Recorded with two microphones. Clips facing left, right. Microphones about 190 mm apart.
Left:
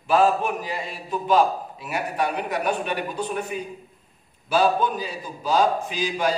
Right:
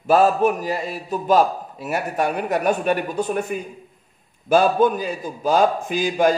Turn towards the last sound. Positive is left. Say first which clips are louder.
# right 6 dB
turn(degrees=-50)  # may be behind; listen again after turning